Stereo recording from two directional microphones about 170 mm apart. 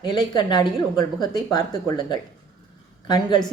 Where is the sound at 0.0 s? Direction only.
25° left (ahead or behind).